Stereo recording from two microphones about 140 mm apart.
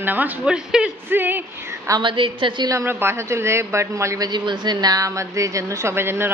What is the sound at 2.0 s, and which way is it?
Speech, 35° right (ahead or behind).